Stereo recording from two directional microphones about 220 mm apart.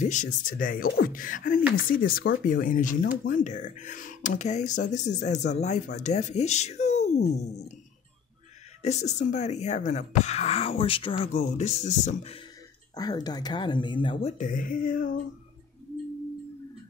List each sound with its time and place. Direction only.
0.0 s speech: 35° left (ahead or behind)
8.8 s speech: 30° left (ahead or behind)
12.9 s speech: 15° left (ahead or behind)
14.4 s speech: 40° left (ahead or behind)